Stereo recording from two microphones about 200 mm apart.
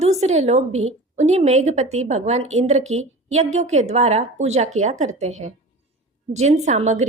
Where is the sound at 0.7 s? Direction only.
90° right.